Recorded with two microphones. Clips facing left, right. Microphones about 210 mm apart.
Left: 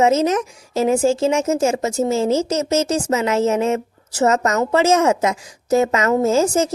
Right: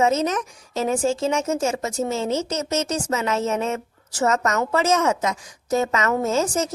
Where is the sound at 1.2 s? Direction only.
25° left (ahead or behind).